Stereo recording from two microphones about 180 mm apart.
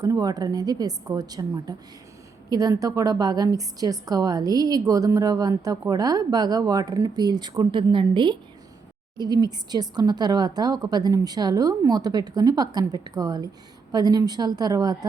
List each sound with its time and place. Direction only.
0.0 s a woman's voice: 20° right (ahead or behind)